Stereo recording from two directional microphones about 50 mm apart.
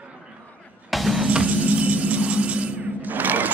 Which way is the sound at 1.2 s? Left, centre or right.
Centre.